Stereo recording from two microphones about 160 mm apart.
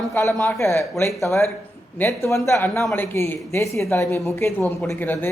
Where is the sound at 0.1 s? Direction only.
15° left (ahead or behind).